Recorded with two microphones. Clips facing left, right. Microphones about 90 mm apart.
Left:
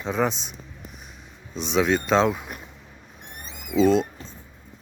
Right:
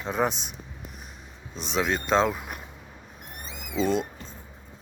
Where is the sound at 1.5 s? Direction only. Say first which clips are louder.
Left 5 dB; centre (ahead or behind).